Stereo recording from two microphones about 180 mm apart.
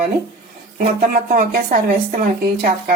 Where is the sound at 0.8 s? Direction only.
50° right (ahead or behind).